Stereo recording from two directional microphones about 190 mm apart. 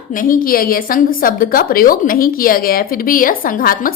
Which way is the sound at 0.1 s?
45° left (ahead or behind).